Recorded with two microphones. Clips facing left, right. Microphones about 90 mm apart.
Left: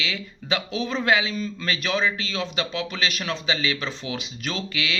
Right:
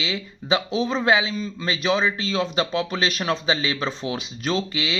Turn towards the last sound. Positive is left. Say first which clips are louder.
# right 4 dB
turn(degrees=-30)  # may be behind; listen again after turning